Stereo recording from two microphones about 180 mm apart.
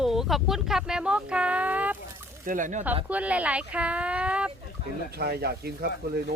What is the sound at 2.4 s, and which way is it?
Speech, 45° right (ahead or behind).